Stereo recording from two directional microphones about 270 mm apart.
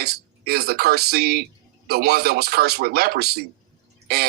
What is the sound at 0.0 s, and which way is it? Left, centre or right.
Speech, right.